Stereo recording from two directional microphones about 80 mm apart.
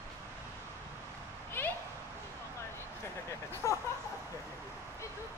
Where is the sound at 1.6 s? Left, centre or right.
Left.